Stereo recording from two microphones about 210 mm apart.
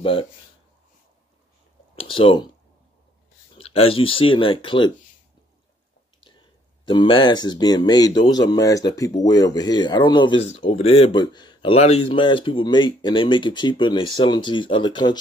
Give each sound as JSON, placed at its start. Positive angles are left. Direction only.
{"t": 0.0, "sound": "speech", "side_deg": 25}
{"t": 2.0, "sound": "speech", "side_deg": 25}
{"t": 3.5, "sound": "speech", "side_deg": 25}
{"t": 6.9, "sound": "speech", "side_deg": 20}